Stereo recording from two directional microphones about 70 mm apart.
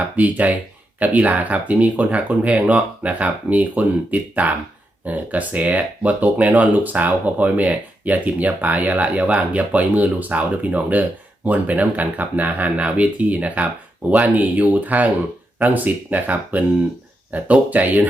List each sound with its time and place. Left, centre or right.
0.2 s speech: right